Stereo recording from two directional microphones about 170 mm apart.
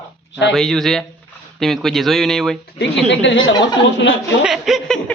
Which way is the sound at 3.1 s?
90° left.